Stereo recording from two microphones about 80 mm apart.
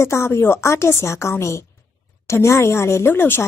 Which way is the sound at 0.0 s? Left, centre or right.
Left.